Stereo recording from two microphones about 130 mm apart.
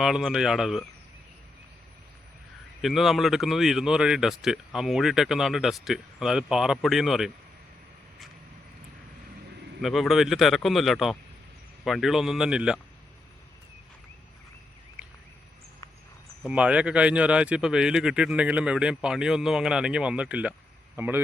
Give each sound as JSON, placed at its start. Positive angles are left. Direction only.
{"t": 0.0, "sound": "speech", "side_deg": 0}
{"t": 2.8, "sound": "speech", "side_deg": 0}
{"t": 9.8, "sound": "speech", "side_deg": 0}
{"t": 15.0, "sound": "a sound", "side_deg": -10}
{"t": 16.5, "sound": "a man's voice", "side_deg": -10}